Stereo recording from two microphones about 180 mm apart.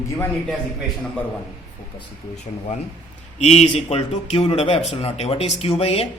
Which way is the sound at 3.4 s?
35° left (ahead or behind).